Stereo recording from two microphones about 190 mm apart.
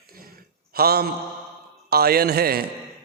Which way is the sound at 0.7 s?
55° right (ahead or behind).